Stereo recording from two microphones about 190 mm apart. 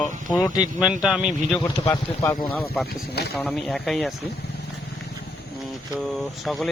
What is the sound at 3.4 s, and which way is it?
Speech, 5° left (ahead or behind).